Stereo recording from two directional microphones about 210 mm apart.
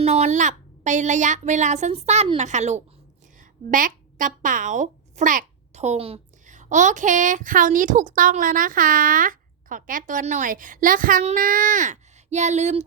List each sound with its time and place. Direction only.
0.0 s a child's voice: 30° right (ahead or behind)